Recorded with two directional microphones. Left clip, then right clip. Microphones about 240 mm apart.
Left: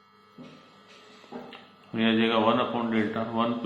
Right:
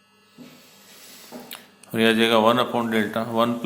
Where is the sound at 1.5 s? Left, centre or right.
Right.